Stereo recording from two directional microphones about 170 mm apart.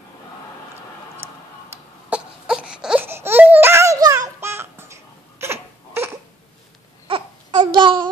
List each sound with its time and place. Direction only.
1.2 s music: 15° right (ahead or behind)
2.0 s baby cry: 5° right (ahead or behind)
7.1 s babbling: 30° right (ahead or behind)